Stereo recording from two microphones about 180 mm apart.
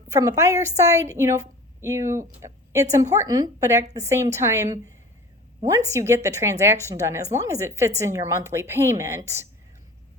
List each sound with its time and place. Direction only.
0.1 s speech: 20° right (ahead or behind)
5.9 s speech: 15° right (ahead or behind)